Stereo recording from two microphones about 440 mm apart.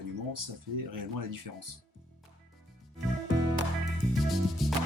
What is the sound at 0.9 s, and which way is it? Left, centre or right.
Speech, right.